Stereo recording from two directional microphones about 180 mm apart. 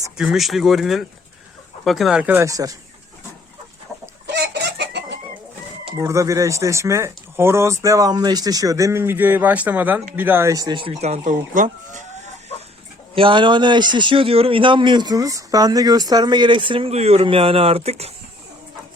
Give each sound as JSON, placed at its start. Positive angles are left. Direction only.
{"t": 0.2, "sound": "speech", "side_deg": 0}
{"t": 4.3, "sound": "chicken", "side_deg": -70}
{"t": 6.0, "sound": "speech", "side_deg": -15}
{"t": 13.1, "sound": "a man's voice", "side_deg": -30}